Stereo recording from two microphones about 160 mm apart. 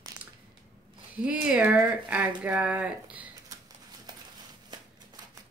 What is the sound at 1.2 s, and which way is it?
Speech, 10° right (ahead or behind).